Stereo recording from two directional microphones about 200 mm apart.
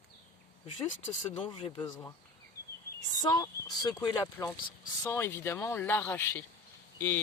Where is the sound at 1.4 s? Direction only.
25° left (ahead or behind).